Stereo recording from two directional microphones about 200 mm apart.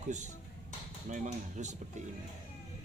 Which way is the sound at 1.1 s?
35° right (ahead or behind).